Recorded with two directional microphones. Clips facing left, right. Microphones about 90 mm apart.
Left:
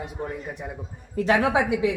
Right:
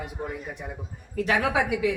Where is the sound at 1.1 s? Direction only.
25° left (ahead or behind).